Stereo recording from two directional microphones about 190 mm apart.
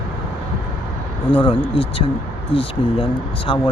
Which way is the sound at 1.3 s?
25° left (ahead or behind).